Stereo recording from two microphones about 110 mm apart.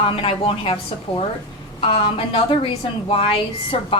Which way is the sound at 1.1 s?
65° left (ahead or behind).